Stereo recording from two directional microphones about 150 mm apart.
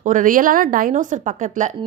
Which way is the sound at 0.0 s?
60° right (ahead or behind).